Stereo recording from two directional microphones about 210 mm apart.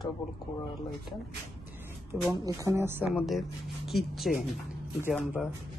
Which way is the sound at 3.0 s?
Centre (ahead or behind).